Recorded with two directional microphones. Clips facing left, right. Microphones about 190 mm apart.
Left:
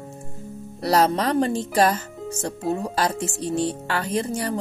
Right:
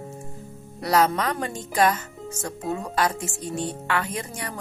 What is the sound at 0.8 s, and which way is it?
Speech, 35° left (ahead or behind).